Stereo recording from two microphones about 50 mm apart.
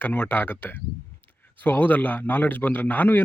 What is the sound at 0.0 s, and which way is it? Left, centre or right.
A man's voice, left.